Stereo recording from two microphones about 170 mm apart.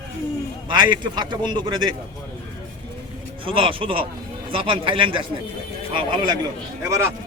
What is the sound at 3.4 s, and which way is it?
A man's voice, 30° right (ahead or behind).